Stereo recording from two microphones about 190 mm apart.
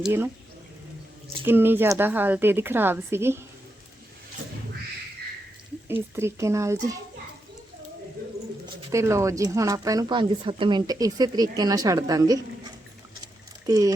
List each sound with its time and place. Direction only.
0.0 s speech: 10° right (ahead or behind)
1.5 s speech: 10° right (ahead or behind)
5.9 s speech: 15° right (ahead or behind)
8.9 s a woman's voice: 15° right (ahead or behind)
13.7 s speech: 20° right (ahead or behind)